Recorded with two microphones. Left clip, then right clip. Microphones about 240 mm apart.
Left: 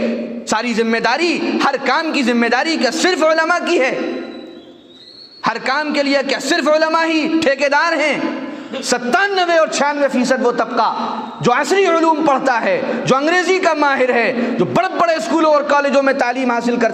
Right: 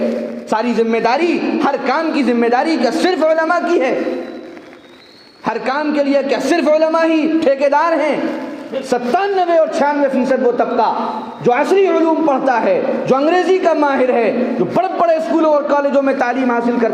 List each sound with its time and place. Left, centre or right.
0.5 s a woman's voice: left
5.5 s a woman's voice: left